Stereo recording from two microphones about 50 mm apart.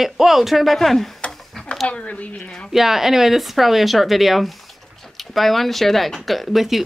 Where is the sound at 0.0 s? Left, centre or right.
Centre.